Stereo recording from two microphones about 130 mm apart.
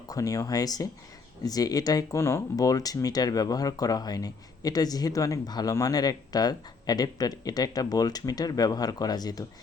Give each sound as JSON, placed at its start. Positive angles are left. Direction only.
{"t": 0.1, "sound": "speech", "side_deg": 25}